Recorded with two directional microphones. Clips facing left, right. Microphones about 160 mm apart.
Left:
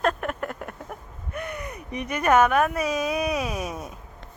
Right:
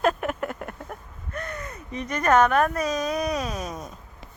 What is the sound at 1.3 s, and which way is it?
Speech, 15° left (ahead or behind).